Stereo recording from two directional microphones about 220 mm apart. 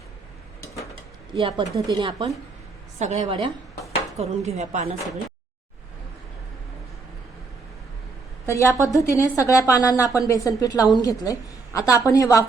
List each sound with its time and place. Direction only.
1.4 s a woman's voice: 20° right (ahead or behind)
8.4 s a woman's voice: 10° left (ahead or behind)